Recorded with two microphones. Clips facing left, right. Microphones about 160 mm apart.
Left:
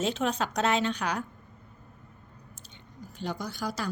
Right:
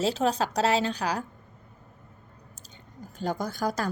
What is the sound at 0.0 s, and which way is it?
A woman's voice, 35° right (ahead or behind).